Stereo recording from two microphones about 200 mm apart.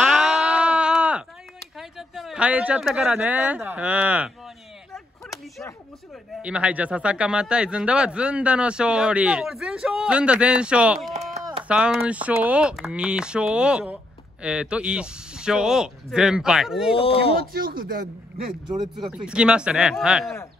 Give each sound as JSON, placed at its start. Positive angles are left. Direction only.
{"t": 0.0, "sound": "a sound", "side_deg": 0}
{"t": 1.8, "sound": "speech", "side_deg": 0}
{"t": 5.3, "sound": "a sound", "side_deg": 15}
{"t": 6.4, "sound": "speech", "side_deg": -5}
{"t": 16.9, "sound": "speech", "side_deg": 30}
{"t": 17.5, "sound": "speech", "side_deg": -45}
{"t": 18.7, "sound": "speech", "side_deg": -20}
{"t": 19.0, "sound": "speech", "side_deg": -5}